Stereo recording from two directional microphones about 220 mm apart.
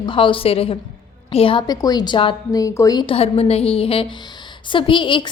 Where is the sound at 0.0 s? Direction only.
25° left (ahead or behind).